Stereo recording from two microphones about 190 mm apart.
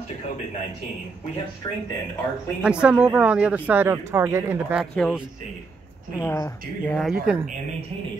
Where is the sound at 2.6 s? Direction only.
5° right (ahead or behind).